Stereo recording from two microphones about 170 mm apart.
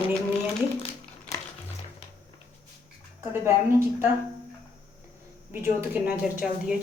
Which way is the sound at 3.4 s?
15° right (ahead or behind).